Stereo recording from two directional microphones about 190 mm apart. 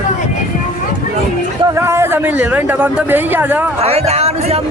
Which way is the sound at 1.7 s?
15° right (ahead or behind).